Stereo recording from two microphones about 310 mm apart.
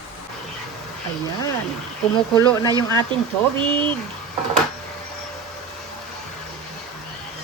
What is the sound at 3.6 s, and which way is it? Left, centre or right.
Speech, centre.